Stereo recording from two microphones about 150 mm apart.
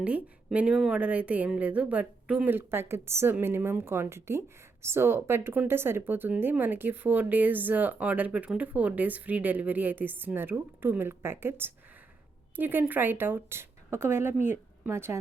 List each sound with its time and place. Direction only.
0.5 s a woman's voice: 5° right (ahead or behind)